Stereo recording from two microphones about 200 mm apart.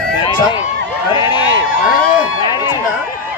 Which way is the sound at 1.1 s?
25° left (ahead or behind).